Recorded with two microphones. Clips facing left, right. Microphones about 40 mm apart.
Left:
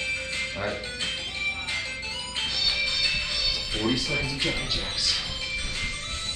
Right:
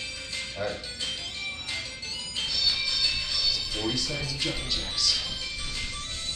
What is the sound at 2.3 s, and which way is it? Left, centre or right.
Music, left.